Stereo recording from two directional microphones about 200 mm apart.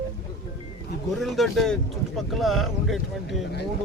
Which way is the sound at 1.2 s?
Centre (ahead or behind).